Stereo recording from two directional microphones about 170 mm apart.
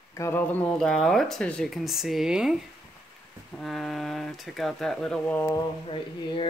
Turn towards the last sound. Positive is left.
turn(degrees=30)  # may be behind; listen again after turning